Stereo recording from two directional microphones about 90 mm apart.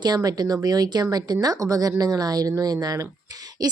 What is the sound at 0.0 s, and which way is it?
Speech, 45° right (ahead or behind).